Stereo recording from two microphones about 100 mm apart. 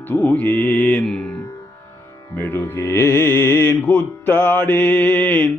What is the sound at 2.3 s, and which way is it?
Mantra, 20° left (ahead or behind).